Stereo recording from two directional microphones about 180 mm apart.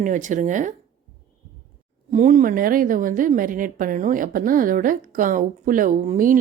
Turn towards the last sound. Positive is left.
turn(degrees=-50)  # may be behind; listen again after turning